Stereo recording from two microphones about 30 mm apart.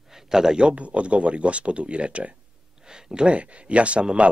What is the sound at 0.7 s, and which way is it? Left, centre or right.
Speech, right.